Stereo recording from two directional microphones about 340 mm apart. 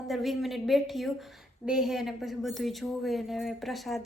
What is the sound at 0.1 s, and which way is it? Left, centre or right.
Speech, centre.